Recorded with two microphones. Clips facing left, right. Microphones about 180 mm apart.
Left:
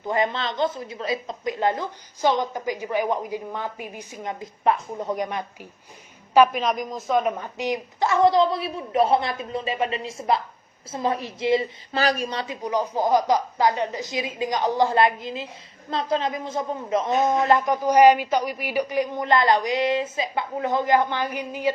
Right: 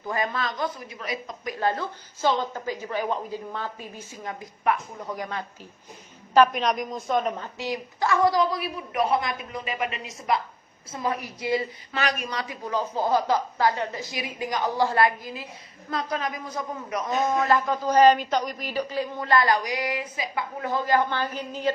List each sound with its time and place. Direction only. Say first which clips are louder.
0.1 s speech: left 4 dB; 25° left (ahead or behind)
6.3 s speech: left 2 dB; 5° left (ahead or behind)